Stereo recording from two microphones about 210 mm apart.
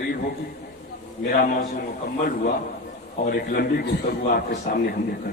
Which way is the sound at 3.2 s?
45° left (ahead or behind).